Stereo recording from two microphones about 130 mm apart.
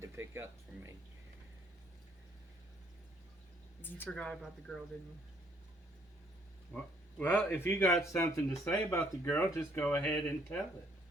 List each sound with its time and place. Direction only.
0.0 s speech: 20° right (ahead or behind)
3.8 s speech: 15° left (ahead or behind)
6.7 s a man's voice: 15° left (ahead or behind)